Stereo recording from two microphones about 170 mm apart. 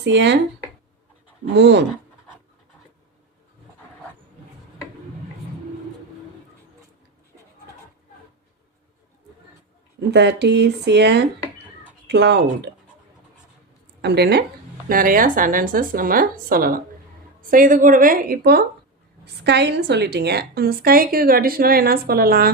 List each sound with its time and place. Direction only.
0.0 s speech: 90° right
1.5 s speech: 90° right
10.1 s speech: 85° right
14.0 s speech: 75° right (ahead or behind)
14.8 s a woman's voice: 55° right (ahead or behind)
19.2 s a woman's voice: 75° right (ahead or behind); by 22.4 s 60° right (ahead or behind)